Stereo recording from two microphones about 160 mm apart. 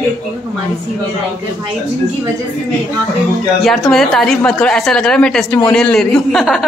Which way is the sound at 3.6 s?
Centre (ahead or behind).